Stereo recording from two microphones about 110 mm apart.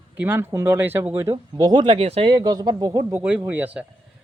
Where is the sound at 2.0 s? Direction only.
65° right (ahead or behind).